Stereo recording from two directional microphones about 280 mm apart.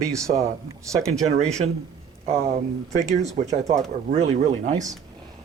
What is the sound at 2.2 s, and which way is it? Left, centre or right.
Speech, right.